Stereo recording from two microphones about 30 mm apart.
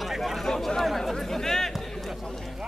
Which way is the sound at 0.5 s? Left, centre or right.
Centre.